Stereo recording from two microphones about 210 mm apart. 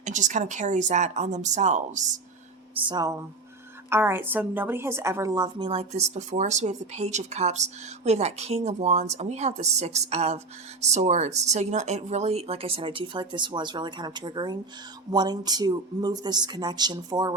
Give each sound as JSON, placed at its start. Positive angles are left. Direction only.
{"t": 0.0, "sound": "a woman's voice", "side_deg": -35}
{"t": 2.8, "sound": "a woman's voice", "side_deg": -20}